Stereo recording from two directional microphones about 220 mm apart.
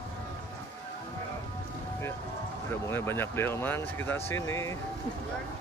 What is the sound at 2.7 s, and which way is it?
Speech, 10° left (ahead or behind).